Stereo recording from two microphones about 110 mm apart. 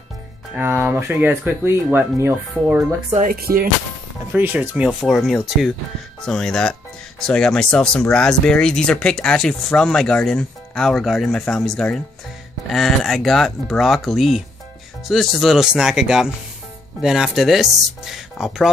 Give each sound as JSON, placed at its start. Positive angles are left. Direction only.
{"t": 0.6, "sound": "speech", "side_deg": -20}
{"t": 4.3, "sound": "speech", "side_deg": -15}
{"t": 5.0, "sound": "speech", "side_deg": 0}